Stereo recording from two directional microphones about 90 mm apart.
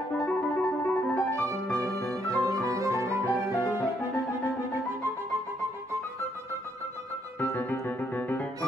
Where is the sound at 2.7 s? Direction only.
35° right (ahead or behind).